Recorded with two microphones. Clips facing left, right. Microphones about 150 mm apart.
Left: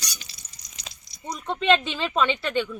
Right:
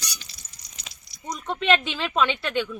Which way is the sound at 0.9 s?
40° left (ahead or behind).